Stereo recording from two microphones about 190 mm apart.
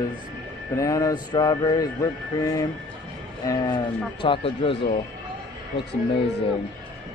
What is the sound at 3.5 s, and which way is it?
Speech, 20° left (ahead or behind).